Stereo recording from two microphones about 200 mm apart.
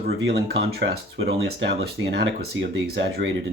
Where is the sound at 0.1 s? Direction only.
55° right (ahead or behind).